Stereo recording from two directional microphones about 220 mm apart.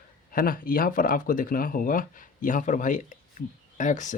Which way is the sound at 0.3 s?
40° left (ahead or behind).